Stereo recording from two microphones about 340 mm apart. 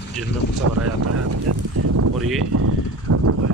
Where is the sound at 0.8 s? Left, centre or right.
Right.